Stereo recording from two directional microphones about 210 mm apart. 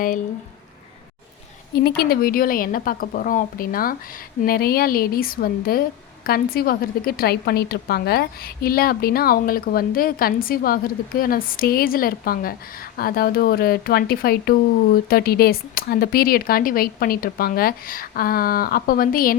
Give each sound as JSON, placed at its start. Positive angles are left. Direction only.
{"t": 2.0, "sound": "a woman's voice", "side_deg": 45}